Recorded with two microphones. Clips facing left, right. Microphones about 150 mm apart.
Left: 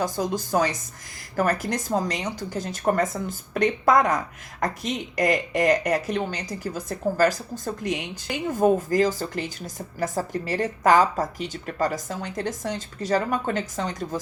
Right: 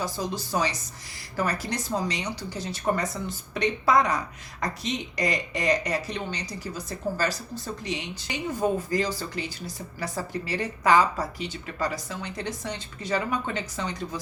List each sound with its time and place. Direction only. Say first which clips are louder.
0.0 s speech: left 5 dB; 50° left (ahead or behind)